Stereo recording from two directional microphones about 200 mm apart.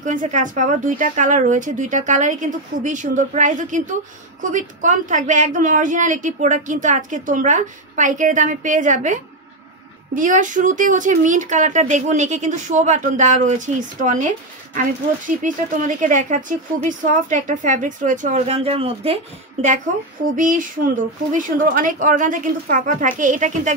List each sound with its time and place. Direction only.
0.0 s speech: 40° right (ahead or behind)
20.3 s speech: 40° right (ahead or behind)